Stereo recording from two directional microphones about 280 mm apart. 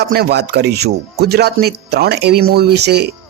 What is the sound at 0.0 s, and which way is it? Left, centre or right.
Speech, right.